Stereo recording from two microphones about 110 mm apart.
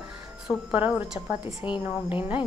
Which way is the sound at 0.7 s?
15° right (ahead or behind).